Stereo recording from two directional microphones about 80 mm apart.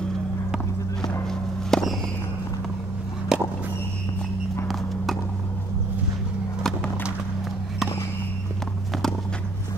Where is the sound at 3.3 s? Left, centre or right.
Centre.